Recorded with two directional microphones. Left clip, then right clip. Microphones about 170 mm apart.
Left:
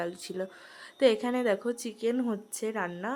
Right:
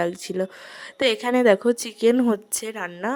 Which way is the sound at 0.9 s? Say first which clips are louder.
Right 5 dB; 45° right (ahead or behind).